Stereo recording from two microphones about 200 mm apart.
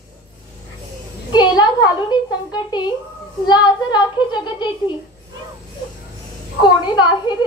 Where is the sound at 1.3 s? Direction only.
20° left (ahead or behind).